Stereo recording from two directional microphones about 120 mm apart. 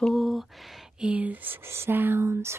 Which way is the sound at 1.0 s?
10° right (ahead or behind).